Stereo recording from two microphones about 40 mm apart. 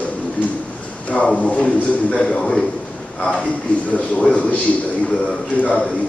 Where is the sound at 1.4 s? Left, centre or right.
Left.